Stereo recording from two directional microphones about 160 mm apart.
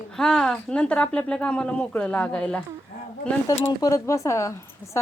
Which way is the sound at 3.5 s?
20° left (ahead or behind).